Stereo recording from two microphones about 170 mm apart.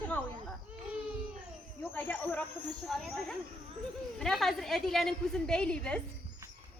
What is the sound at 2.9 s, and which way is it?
Speech, centre (ahead or behind).